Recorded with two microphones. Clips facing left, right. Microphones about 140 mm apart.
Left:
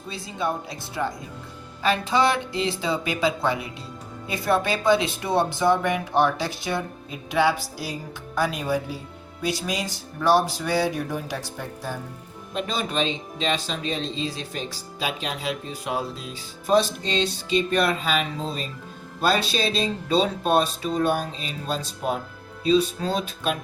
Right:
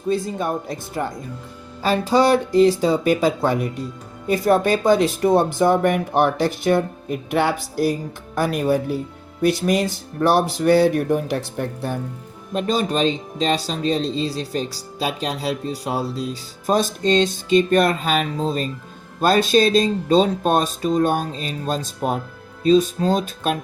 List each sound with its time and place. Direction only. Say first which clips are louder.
0.1 s speech: right 6 dB; 50° right (ahead or behind)
12.5 s speech: right 6 dB; 40° right (ahead or behind)